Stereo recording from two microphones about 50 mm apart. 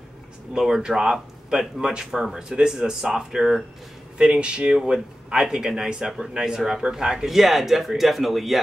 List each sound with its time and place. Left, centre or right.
0.5 s speech: centre
7.2 s speech: centre